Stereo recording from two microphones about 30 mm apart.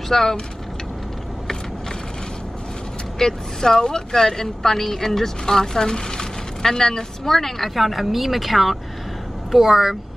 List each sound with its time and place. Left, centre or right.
0.1 s speech: centre
3.2 s a woman's voice: centre
7.2 s speech: centre
7.7 s speech: centre
9.6 s speech: centre